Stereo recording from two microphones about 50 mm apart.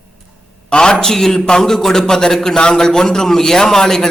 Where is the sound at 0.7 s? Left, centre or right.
Centre.